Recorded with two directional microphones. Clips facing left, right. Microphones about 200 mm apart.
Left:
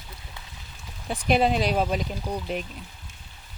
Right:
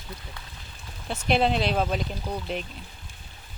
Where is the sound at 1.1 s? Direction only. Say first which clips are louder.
Left 1 dB; 5° left (ahead or behind).